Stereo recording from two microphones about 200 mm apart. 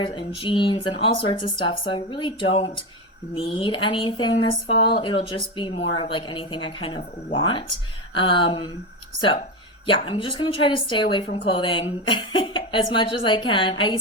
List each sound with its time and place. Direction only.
0.0 s speech: 25° left (ahead or behind)
9.8 s speech: 25° left (ahead or behind)